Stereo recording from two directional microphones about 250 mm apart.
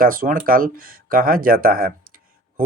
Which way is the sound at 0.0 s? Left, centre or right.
Right.